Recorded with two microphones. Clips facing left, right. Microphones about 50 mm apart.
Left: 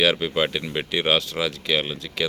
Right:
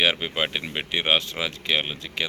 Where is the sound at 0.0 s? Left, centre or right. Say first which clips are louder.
Left 3 dB; centre.